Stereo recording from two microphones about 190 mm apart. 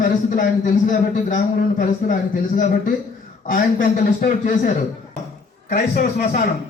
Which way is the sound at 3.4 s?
45° left (ahead or behind).